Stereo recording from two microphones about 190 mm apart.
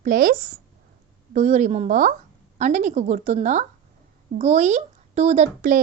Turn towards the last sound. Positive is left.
turn(degrees=-40)  # may be behind; listen again after turning